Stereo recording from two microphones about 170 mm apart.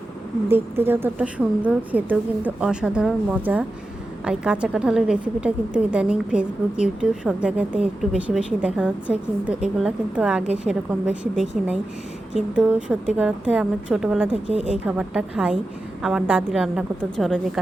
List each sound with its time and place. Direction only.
0.4 s a woman's voice: 15° right (ahead or behind)
14.4 s speech: 35° left (ahead or behind)
14.8 s a woman's voice: 5° right (ahead or behind)